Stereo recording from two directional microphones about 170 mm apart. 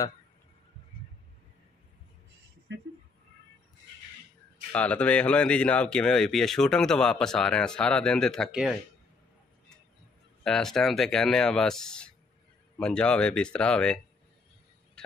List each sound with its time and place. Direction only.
2.7 s speech: 90° right
4.7 s speech: 5° left (ahead or behind)
10.4 s speech: 5° left (ahead or behind)
15.0 s a sound: 5° left (ahead or behind)